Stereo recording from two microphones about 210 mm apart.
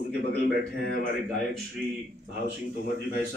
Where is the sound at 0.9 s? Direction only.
65° right (ahead or behind).